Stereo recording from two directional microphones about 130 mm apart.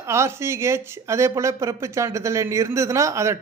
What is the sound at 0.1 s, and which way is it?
Speech, 20° right (ahead or behind).